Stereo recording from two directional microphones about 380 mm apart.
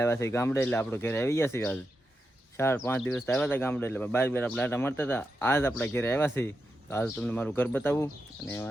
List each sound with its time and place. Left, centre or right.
0.0 s speech: centre